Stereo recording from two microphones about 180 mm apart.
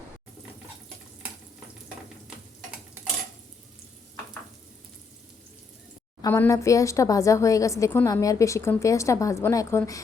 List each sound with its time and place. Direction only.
6.2 s a woman's voice: 15° left (ahead or behind)